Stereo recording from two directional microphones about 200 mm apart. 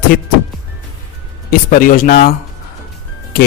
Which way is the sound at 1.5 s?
45° left (ahead or behind).